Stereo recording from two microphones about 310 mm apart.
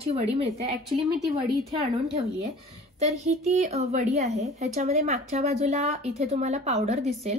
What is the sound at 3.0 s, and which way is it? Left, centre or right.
Speech, right.